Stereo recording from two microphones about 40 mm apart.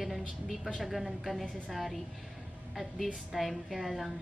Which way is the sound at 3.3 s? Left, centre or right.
Centre.